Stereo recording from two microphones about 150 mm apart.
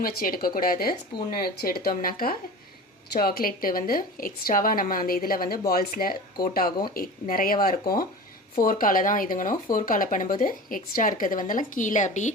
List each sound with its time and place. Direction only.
0.0 s a woman's voice: 75° left (ahead or behind)
3.1 s a woman's voice: 90° left; by 12.3 s 55° left (ahead or behind)